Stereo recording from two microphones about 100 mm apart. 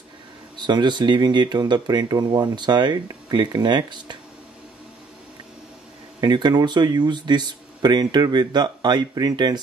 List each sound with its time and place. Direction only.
0.6 s speech: 50° right (ahead or behind)
6.2 s speech: 45° right (ahead or behind)